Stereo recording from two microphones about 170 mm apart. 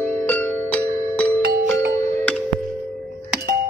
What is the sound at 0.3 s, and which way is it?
Music, 10° left (ahead or behind).